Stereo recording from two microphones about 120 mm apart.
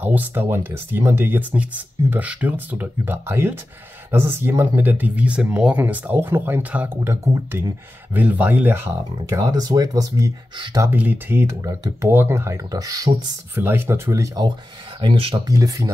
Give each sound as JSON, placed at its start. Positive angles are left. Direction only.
{"t": 0.0, "sound": "speech", "side_deg": -15}
{"t": 10.9, "sound": "speech", "side_deg": -15}
{"t": 13.6, "sound": "speech", "side_deg": -20}
{"t": 15.0, "sound": "speech", "side_deg": -45}
{"t": 15.4, "sound": "speech", "side_deg": -30}